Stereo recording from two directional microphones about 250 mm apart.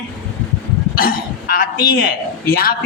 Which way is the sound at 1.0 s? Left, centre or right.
Left.